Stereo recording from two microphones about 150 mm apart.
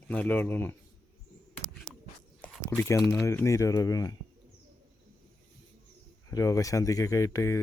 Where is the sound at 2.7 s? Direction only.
20° left (ahead or behind).